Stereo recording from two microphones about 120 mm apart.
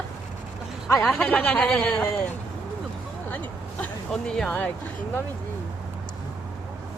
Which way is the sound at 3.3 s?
15° left (ahead or behind).